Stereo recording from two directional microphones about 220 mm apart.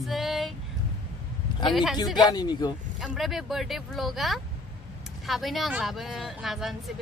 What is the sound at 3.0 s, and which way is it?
A woman's voice, centre (ahead or behind).